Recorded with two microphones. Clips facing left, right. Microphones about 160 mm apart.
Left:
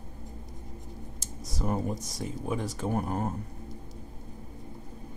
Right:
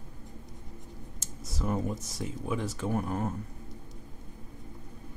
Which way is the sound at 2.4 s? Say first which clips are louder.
Left 1 dB; 35° left (ahead or behind).